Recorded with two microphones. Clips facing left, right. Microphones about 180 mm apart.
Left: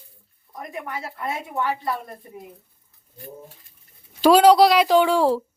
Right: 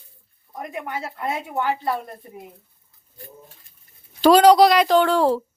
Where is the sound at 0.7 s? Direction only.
25° right (ahead or behind).